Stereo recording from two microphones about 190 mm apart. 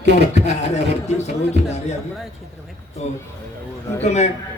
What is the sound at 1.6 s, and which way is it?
Speech, 65° right (ahead or behind).